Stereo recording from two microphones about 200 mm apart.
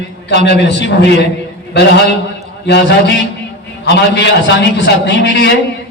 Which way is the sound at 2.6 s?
60° left (ahead or behind).